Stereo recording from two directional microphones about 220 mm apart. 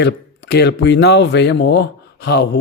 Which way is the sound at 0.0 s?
50° left (ahead or behind).